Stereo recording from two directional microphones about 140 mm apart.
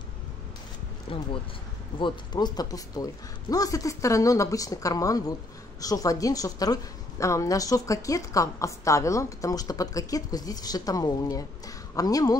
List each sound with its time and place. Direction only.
1.1 s a woman's voice: 40° left (ahead or behind); by 12.4 s 25° left (ahead or behind)